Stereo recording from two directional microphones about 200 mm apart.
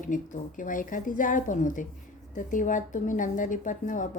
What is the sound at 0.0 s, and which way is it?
Speech, 40° left (ahead or behind).